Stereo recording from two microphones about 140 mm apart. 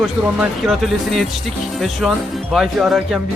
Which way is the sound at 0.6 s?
Centre (ahead or behind).